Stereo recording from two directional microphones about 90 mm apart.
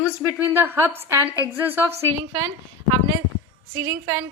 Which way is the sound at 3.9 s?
35° right (ahead or behind).